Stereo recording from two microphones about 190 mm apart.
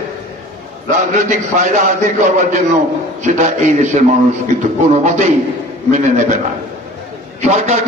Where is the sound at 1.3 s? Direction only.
40° right (ahead or behind).